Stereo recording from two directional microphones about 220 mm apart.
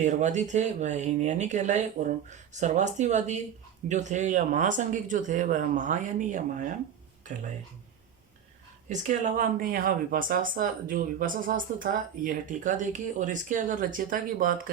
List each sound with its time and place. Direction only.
0.0 s speech: 35° right (ahead or behind)
8.9 s speech: 35° right (ahead or behind)